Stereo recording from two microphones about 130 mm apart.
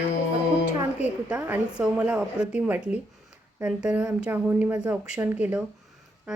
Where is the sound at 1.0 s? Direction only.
10° right (ahead or behind).